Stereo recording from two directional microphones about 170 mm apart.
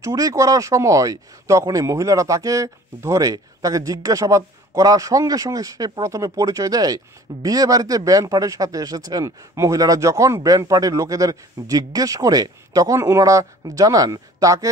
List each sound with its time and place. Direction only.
0.0 s speech: 20° right (ahead or behind)